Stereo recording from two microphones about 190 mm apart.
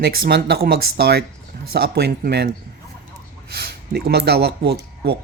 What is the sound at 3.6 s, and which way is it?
Speech, 55° right (ahead or behind).